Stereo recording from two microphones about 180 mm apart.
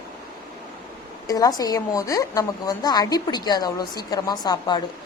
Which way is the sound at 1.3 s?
20° left (ahead or behind).